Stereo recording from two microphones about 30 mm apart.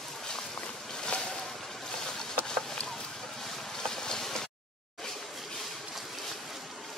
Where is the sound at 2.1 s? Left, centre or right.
Left.